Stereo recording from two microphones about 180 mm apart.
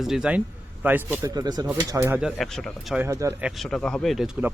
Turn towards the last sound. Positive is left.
turn(degrees=-5)  # may be behind; listen again after turning